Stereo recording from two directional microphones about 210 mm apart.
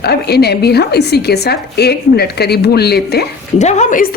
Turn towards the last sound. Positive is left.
turn(degrees=35)  # may be behind; listen again after turning